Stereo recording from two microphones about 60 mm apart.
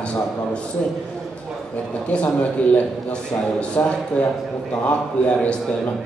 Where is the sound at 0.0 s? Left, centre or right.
Centre.